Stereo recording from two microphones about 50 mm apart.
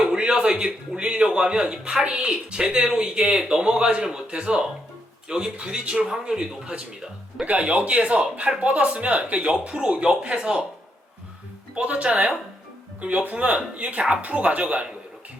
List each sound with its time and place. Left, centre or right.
0.1 s speech: centre
7.4 s speech: right
11.7 s speech: right